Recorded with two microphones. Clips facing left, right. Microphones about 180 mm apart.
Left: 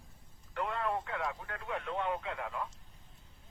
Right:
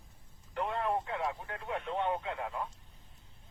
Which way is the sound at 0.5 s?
25° right (ahead or behind).